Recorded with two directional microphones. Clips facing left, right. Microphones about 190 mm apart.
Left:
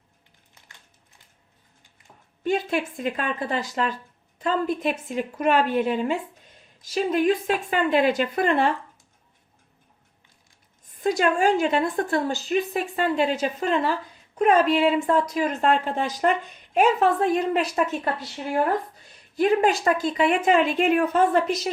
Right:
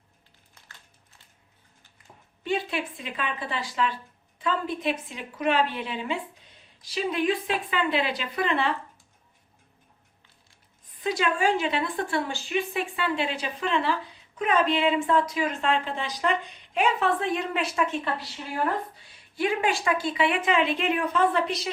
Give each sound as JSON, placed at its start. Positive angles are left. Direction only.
{"t": 2.4, "sound": "speech", "side_deg": 45}
{"t": 10.8, "sound": "speech", "side_deg": 45}